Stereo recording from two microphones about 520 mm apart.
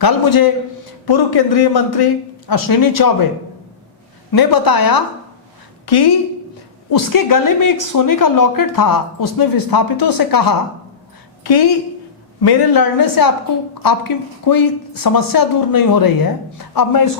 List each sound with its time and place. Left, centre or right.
0.0 s a man's voice: left
4.3 s a woman's voice: left
12.4 s speech: left